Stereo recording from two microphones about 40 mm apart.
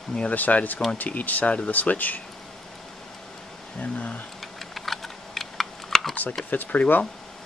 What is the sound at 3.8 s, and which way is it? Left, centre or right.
Speech, left.